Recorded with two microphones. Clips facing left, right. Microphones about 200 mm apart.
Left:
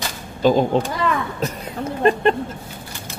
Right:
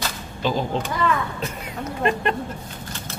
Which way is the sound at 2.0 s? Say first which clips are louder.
Left 6 dB; 35° left (ahead or behind).